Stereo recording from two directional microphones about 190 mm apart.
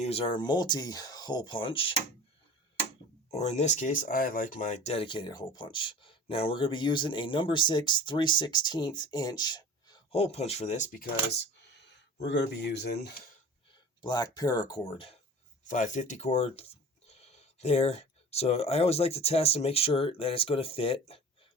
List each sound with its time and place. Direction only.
0.0 s speech: 30° left (ahead or behind)
3.3 s speech: 35° left (ahead or behind)
12.2 s speech: 65° left (ahead or behind)
14.0 s speech: 20° left (ahead or behind)
15.6 s speech: 40° left (ahead or behind)